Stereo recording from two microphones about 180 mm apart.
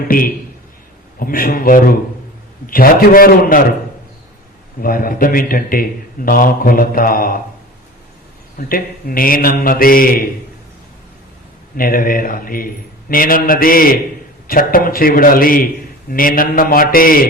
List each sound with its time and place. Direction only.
0.1 s a man's voice: 55° left (ahead or behind)
4.8 s a man's voice: 55° left (ahead or behind)
8.5 s a man's voice: 50° left (ahead or behind)
11.8 s a man's voice: 50° left (ahead or behind)